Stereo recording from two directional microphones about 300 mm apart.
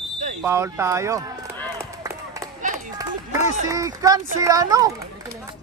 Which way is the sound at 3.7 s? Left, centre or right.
Centre.